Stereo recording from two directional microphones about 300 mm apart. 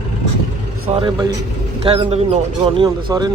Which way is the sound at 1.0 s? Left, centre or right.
Centre.